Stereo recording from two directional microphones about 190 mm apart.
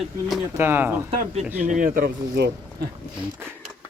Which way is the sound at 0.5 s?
10° right (ahead or behind).